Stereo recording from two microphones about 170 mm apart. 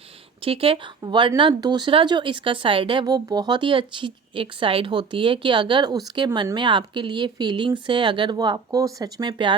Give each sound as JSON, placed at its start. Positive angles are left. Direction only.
{"t": 0.4, "sound": "speech", "side_deg": -35}